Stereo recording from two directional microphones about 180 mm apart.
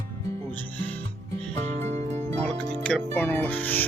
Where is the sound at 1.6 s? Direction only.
40° right (ahead or behind).